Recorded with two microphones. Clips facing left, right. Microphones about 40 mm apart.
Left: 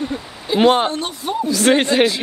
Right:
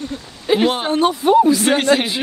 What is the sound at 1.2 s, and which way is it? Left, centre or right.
Speech, right.